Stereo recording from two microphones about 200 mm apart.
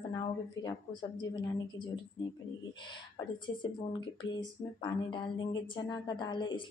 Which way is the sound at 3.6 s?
25° left (ahead or behind).